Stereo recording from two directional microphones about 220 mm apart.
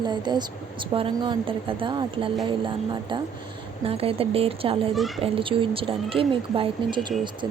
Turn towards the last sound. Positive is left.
turn(degrees=-20)  # may be behind; listen again after turning